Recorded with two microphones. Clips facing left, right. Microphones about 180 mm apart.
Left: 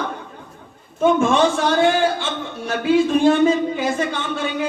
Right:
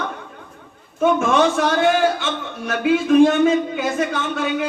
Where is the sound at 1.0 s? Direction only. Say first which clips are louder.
Left 1 dB; 30° left (ahead or behind).